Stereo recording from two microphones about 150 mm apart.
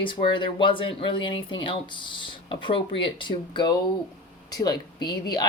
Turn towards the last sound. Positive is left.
turn(degrees=25)  # may be behind; listen again after turning